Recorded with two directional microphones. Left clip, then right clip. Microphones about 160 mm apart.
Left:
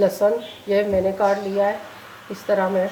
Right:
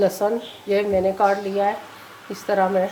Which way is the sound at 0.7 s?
30° right (ahead or behind).